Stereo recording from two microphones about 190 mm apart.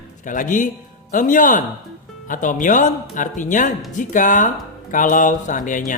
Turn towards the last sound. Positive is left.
turn(degrees=45)  # may be behind; listen again after turning